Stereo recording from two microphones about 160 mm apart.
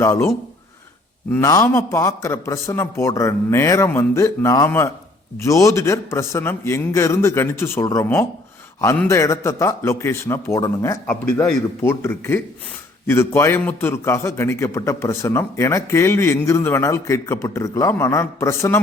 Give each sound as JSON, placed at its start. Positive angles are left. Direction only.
{"t": 0.0, "sound": "a man's voice", "side_deg": 15}